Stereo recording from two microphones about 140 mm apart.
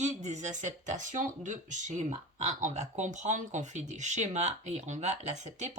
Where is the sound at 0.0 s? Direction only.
55° right (ahead or behind).